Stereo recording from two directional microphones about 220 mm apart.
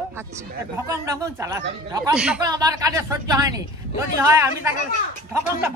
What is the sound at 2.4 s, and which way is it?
Speech, 15° right (ahead or behind).